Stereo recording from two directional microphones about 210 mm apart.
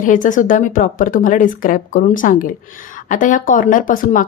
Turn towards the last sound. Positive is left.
turn(degrees=40)  # may be behind; listen again after turning